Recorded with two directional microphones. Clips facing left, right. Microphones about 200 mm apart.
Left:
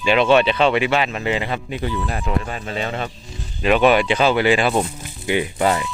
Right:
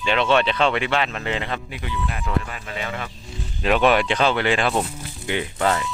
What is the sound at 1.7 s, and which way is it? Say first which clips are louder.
Speech: left 5 dB; 35° left (ahead or behind).